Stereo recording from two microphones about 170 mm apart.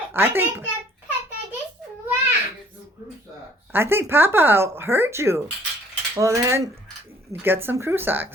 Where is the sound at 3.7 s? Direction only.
15° right (ahead or behind).